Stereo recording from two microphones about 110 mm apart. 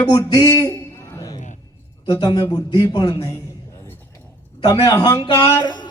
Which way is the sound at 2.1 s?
40° left (ahead or behind).